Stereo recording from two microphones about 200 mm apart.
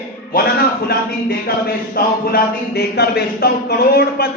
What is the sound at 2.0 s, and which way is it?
Speech, 45° left (ahead or behind).